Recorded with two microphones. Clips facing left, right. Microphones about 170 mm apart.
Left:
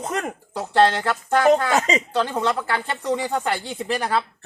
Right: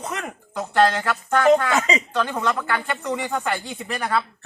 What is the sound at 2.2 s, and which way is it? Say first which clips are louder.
Speech: left 1 dB; 30° left (ahead or behind).